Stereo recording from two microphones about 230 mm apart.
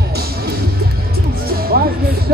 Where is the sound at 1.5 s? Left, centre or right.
Right.